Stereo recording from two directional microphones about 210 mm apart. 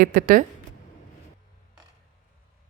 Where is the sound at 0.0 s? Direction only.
40° right (ahead or behind).